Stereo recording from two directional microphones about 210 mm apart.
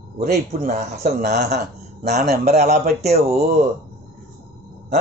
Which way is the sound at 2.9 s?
30° right (ahead or behind).